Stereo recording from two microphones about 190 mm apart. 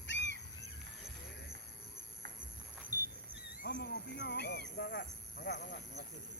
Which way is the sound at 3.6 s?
50° left (ahead or behind).